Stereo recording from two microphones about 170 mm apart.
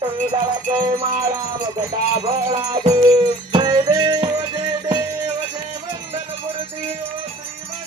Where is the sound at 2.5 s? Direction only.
20° right (ahead or behind).